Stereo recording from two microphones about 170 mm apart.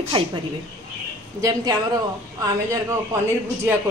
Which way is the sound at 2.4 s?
20° right (ahead or behind).